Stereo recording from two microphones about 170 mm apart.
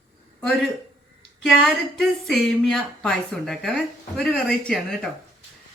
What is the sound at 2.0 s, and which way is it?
Speech, centre (ahead or behind).